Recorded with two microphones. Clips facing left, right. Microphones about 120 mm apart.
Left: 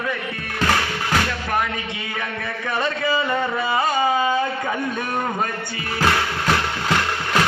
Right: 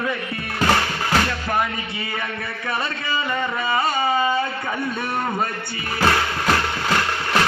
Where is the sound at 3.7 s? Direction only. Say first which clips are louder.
Left 1 dB; 15° left (ahead or behind).